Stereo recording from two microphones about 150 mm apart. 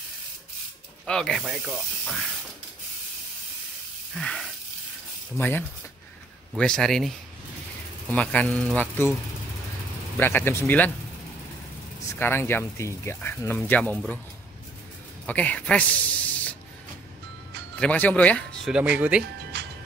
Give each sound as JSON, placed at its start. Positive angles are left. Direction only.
{"t": 1.0, "sound": "speech", "side_deg": 5}
{"t": 4.1, "sound": "a sound", "side_deg": 5}
{"t": 5.4, "sound": "speech", "side_deg": 10}
{"t": 10.1, "sound": "speech", "side_deg": 15}
{"t": 12.2, "sound": "speech", "side_deg": 15}
{"t": 15.2, "sound": "speech", "side_deg": 10}
{"t": 17.7, "sound": "speech", "side_deg": 10}
{"t": 18.7, "sound": "speech", "side_deg": -10}
{"t": 19.5, "sound": "music", "side_deg": -90}